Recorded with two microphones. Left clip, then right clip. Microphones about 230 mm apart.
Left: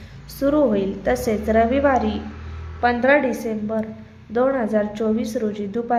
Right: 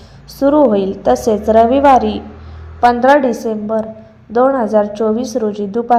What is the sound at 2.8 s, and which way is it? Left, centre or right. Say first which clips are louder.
Speech: right 8 dB; centre.